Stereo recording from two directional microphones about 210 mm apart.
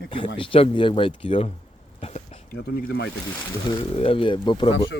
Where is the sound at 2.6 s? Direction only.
50° left (ahead or behind).